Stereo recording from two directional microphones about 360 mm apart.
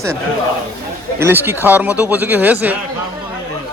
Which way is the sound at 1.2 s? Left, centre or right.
Centre.